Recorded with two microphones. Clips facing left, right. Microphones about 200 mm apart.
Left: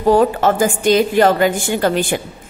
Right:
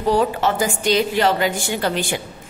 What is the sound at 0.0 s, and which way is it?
A woman's voice, 50° left (ahead or behind).